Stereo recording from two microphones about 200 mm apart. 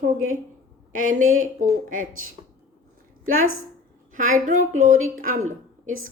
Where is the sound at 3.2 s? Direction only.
90° right.